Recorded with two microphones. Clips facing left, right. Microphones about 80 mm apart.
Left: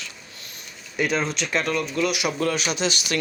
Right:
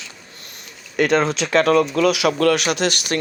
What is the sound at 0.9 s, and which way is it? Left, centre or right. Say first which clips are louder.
Speech: right 7 dB; right.